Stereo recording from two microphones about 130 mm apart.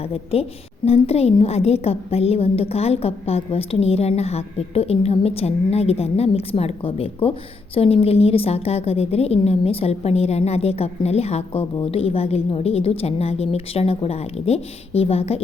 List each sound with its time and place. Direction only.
0.1 s a woman's voice: 50° left (ahead or behind)